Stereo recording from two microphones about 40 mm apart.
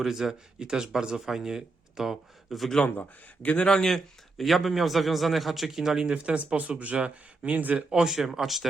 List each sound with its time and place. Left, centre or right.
0.0 s speech: centre
0.6 s speech: centre
3.4 s speech: left
3.8 s a man's voice: centre
5.8 s speech: centre
6.6 s speech: right
7.9 s a man's voice: centre